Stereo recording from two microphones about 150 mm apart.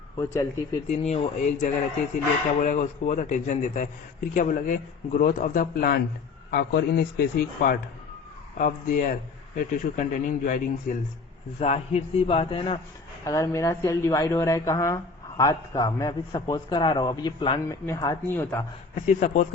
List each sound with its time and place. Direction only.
0.2 s a woman's voice: 20° left (ahead or behind)
0.9 s a man's voice: 45° left (ahead or behind); by 6.0 s 75° left (ahead or behind)
6.5 s a man's voice: 90° left
8.5 s a man's voice: 65° left (ahead or behind)
11.6 s a man's voice: 45° left (ahead or behind)
13.2 s a woman's voice: 20° left (ahead or behind)
19.0 s a man's voice: 55° left (ahead or behind)